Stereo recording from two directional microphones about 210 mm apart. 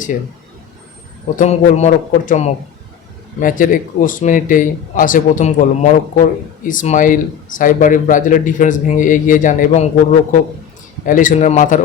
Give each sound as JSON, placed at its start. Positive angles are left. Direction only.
{"t": 1.4, "sound": "a man's voice", "side_deg": 30}